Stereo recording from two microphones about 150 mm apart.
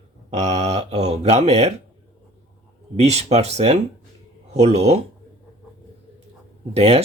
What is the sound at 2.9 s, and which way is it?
Speech, 45° right (ahead or behind).